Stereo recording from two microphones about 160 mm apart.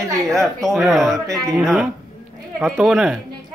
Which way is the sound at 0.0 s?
Centre (ahead or behind).